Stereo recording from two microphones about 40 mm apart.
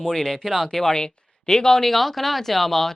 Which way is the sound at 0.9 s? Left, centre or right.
Centre.